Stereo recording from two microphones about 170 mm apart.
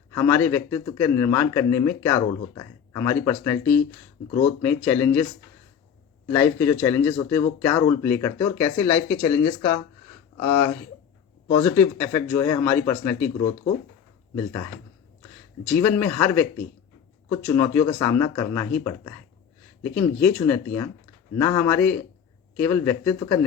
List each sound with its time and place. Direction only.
0.1 s speech: 15° left (ahead or behind)
6.2 s speech: 10° left (ahead or behind)
14.3 s speech: 15° left (ahead or behind)
20.2 s speech: 15° left (ahead or behind)